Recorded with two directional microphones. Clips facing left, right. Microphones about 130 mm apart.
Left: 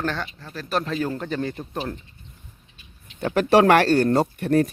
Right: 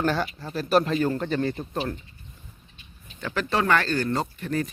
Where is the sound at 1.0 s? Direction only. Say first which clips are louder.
Right 2 dB; 5° left (ahead or behind).